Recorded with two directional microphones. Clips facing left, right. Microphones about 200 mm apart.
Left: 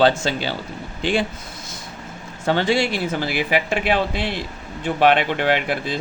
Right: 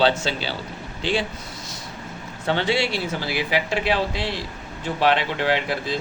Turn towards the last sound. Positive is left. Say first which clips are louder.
# left 2 dB
turn(degrees=55)  # may be behind; listen again after turning